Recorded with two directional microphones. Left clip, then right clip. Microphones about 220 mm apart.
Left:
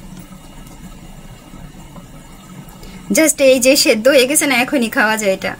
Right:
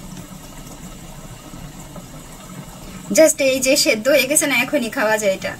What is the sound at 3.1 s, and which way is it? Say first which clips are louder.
A woman's voice: left 2 dB; 55° left (ahead or behind).